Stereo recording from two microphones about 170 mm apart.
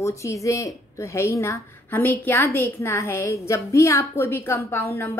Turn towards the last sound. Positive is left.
turn(degrees=15)  # may be behind; listen again after turning